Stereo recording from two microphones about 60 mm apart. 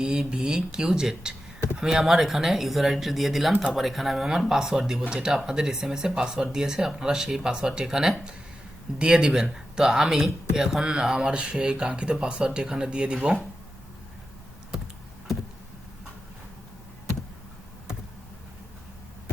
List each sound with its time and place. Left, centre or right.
0.0 s speech: centre